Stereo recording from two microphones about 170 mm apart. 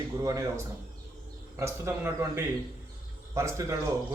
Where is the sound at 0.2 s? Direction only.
20° right (ahead or behind).